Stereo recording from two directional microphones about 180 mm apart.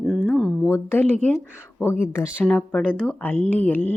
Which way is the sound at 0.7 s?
15° left (ahead or behind).